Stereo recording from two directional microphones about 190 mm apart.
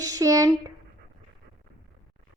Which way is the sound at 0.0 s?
20° right (ahead or behind).